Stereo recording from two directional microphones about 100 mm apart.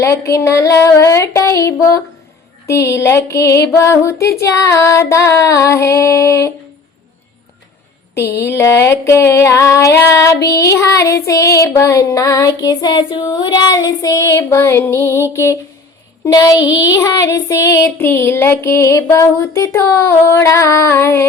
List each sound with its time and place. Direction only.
0.0 s child singing: 30° left (ahead or behind)
8.1 s a sound: 30° left (ahead or behind)
15.3 s child singing: 25° left (ahead or behind)